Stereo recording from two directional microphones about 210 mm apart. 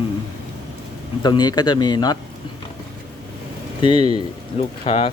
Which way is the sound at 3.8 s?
20° left (ahead or behind).